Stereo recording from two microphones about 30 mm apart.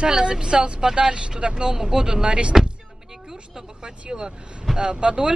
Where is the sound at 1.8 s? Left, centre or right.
Centre.